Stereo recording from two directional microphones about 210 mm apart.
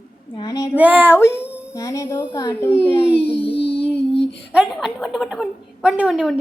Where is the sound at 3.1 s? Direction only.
25° left (ahead or behind).